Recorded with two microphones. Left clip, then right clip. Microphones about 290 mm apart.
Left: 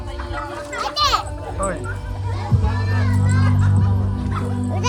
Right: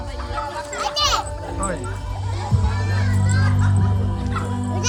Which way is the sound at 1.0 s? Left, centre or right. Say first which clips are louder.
Left 3 dB; centre.